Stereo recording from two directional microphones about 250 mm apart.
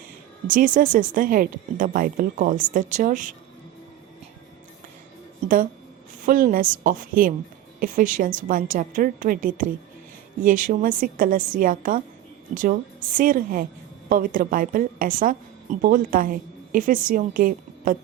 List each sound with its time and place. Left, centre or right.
0.4 s speech: right
6.2 s speech: right